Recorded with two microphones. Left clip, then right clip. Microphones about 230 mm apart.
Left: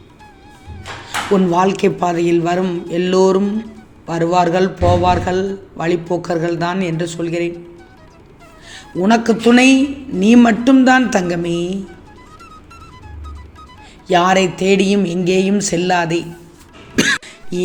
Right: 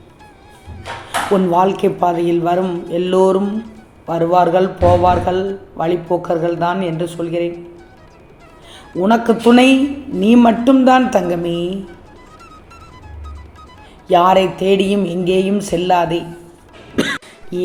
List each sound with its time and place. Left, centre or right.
1.3 s a man's voice: left
9.0 s a man's voice: left
14.1 s a man's voice: left
16.9 s music: left